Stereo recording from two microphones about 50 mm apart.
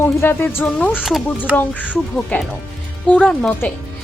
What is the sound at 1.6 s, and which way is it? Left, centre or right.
Speech, left.